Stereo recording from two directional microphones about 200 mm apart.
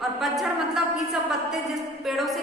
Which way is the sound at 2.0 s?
Centre (ahead or behind).